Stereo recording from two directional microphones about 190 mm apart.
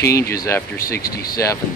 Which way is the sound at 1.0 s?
50° left (ahead or behind).